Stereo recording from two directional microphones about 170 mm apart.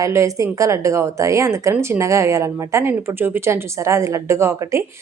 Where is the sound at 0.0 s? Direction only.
20° right (ahead or behind).